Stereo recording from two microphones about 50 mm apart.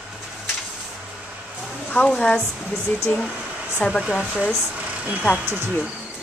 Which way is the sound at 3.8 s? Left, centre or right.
Left.